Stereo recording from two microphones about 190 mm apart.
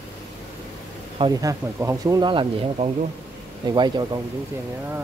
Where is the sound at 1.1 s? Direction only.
20° right (ahead or behind).